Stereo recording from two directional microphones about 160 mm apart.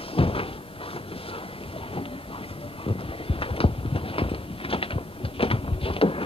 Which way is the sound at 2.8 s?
35° left (ahead or behind).